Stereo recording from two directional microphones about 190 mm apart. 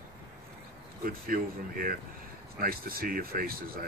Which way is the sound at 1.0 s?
50° right (ahead or behind).